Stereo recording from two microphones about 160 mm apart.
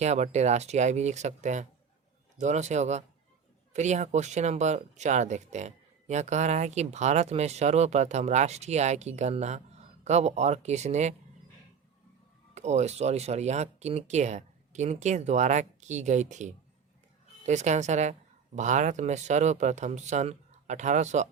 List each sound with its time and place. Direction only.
0.0 s speech: 45° right (ahead or behind)
12.5 s speech: 45° right (ahead or behind)